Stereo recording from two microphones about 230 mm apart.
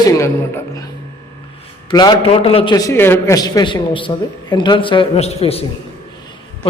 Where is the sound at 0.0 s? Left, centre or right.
Centre.